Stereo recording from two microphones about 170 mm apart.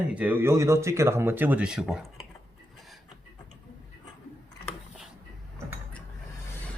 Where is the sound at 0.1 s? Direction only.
10° right (ahead or behind).